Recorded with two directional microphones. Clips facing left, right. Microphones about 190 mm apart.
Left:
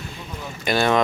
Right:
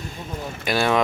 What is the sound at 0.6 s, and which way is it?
Speech, 5° right (ahead or behind).